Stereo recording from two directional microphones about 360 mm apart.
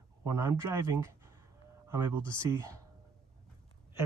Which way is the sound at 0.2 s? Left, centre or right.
Centre.